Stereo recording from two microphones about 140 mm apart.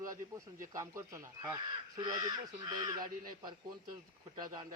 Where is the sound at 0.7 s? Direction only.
20° right (ahead or behind).